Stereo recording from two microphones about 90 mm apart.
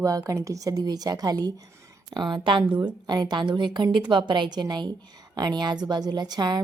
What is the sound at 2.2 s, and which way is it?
A woman's voice, 60° right (ahead or behind).